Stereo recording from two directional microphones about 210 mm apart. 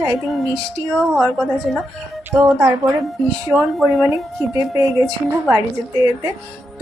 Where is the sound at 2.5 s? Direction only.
5° right (ahead or behind).